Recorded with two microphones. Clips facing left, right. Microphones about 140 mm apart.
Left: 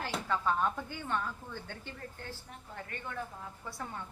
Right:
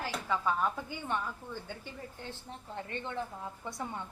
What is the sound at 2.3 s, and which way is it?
A woman's voice, 25° right (ahead or behind).